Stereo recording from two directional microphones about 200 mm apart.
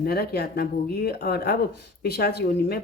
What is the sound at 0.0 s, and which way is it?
Speech, 50° left (ahead or behind).